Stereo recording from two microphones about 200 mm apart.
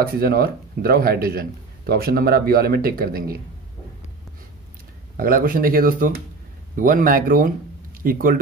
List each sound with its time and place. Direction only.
0.0 s speech: 50° right (ahead or behind)
5.1 s speech: 45° right (ahead or behind)